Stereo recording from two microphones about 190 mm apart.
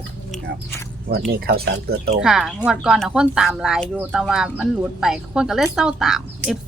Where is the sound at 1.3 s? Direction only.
55° right (ahead or behind).